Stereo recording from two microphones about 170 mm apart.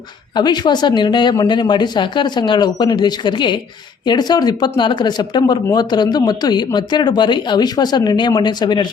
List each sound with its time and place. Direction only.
0.3 s speech: 25° left (ahead or behind)